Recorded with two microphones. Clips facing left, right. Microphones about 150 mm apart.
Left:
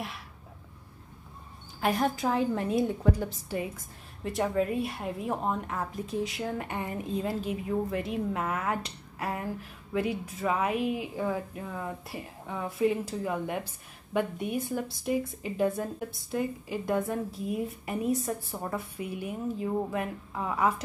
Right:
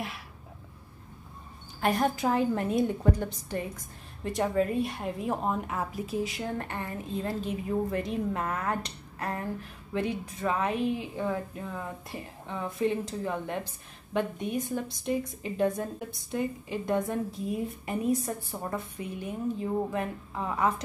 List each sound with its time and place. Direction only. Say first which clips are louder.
1.8 s a woman's voice: right 1 dB; centre (ahead or behind)
6.7 s a woman's voice: left 2 dB; 20° left (ahead or behind)
7.4 s a woman's voice: even; centre (ahead or behind)